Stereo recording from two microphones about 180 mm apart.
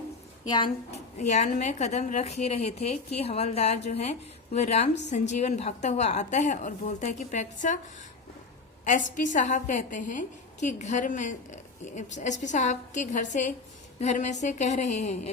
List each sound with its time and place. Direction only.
0.4 s a woman's voice: 25° left (ahead or behind)
0.9 s a woman's voice: 40° left (ahead or behind)
8.8 s a woman's voice: 45° left (ahead or behind)